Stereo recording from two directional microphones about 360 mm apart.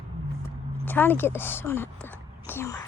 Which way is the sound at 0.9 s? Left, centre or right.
Centre.